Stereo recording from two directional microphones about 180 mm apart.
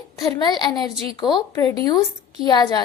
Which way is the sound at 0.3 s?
25° left (ahead or behind).